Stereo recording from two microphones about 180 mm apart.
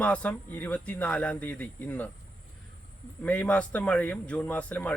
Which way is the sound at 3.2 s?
10° left (ahead or behind).